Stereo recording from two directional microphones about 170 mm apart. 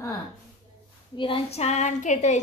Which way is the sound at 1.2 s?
35° left (ahead or behind).